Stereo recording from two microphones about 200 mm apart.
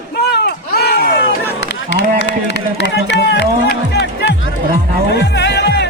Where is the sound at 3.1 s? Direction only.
60° left (ahead or behind).